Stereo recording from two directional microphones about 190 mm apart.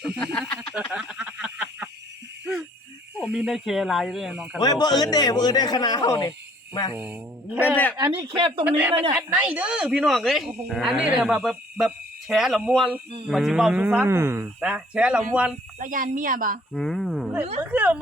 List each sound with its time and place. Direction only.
0.3 s a sound: 5° left (ahead or behind)
3.2 s speech: 5° right (ahead or behind)
4.6 s speech: 20° left (ahead or behind)
6.9 s speech: 10° right (ahead or behind)
7.9 s speech: 20° right (ahead or behind)
8.6 s speech: 10° right (ahead or behind)
15.8 s speech: 45° right (ahead or behind)
16.7 s a sound: centre (ahead or behind)
17.6 s speech: 10° right (ahead or behind)